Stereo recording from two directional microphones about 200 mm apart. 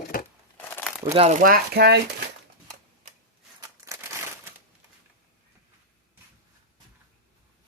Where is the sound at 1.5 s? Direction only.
50° right (ahead or behind).